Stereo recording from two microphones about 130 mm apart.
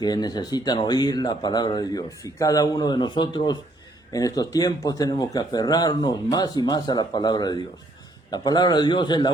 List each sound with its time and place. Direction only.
0.0 s speech: 30° left (ahead or behind)